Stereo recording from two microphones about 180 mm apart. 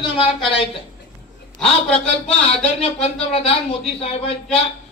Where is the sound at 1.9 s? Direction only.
35° left (ahead or behind).